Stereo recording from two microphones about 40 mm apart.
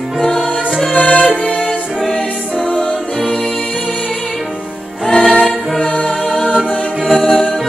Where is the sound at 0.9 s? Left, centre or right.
Left.